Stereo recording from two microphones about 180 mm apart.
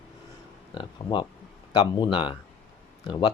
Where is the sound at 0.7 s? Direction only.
25° left (ahead or behind).